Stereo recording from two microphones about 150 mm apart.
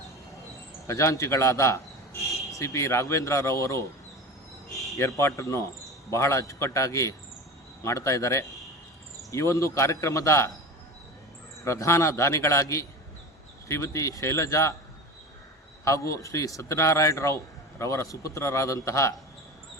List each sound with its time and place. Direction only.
0.9 s speech: 20° left (ahead or behind)
4.7 s a sound: centre (ahead or behind)
4.9 s speech: 20° left (ahead or behind)
11.6 s speech: 20° left (ahead or behind)
15.8 s speech: 20° left (ahead or behind)